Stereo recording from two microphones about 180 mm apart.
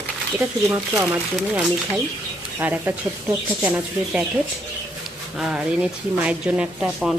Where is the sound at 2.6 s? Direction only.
10° right (ahead or behind).